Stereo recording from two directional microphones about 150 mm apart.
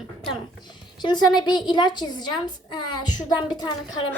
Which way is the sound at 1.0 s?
30° left (ahead or behind).